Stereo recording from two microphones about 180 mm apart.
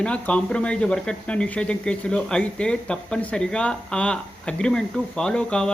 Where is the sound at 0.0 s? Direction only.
5° left (ahead or behind).